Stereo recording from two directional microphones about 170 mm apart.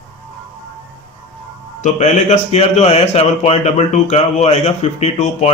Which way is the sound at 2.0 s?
45° left (ahead or behind).